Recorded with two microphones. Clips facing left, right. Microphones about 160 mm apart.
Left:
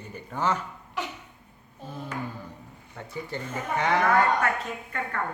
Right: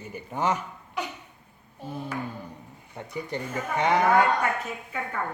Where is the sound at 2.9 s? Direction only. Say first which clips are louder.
Right 2 dB; 15° right (ahead or behind).